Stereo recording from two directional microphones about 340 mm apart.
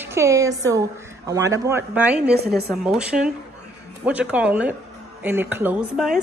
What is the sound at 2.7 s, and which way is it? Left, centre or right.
A woman's voice, centre.